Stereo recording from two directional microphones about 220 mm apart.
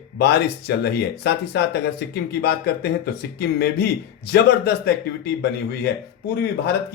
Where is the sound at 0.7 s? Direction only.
50° left (ahead or behind).